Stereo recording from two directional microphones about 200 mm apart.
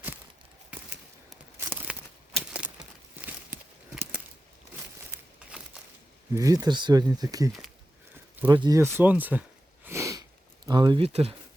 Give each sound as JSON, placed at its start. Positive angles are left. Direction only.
{"t": 1.5, "sound": "a sound", "side_deg": -10}
{"t": 2.3, "sound": "crumpling", "side_deg": -5}
{"t": 3.2, "sound": "a sound", "side_deg": -10}
{"t": 6.3, "sound": "speech", "side_deg": -15}
{"t": 9.8, "sound": "sniff", "side_deg": -15}
{"t": 10.7, "sound": "speech", "side_deg": -20}